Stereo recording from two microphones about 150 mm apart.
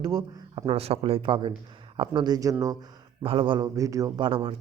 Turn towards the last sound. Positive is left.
turn(degrees=-30)  # may be behind; listen again after turning